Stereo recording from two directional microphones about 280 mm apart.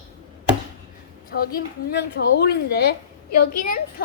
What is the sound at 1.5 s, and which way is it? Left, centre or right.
A woman's voice, left.